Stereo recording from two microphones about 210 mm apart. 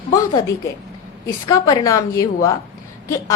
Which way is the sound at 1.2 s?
15° left (ahead or behind).